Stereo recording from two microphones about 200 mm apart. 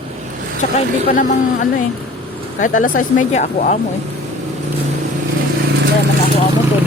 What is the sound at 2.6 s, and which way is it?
Speech, 40° left (ahead or behind).